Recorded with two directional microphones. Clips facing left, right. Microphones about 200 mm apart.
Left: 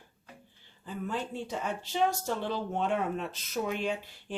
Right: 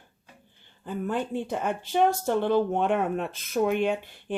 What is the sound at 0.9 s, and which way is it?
Speech, 55° right (ahead or behind).